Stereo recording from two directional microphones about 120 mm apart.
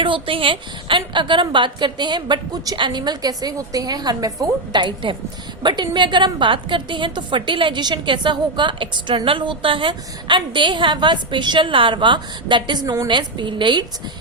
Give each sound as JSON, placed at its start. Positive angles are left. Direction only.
{"t": 0.0, "sound": "a woman's voice", "side_deg": -45}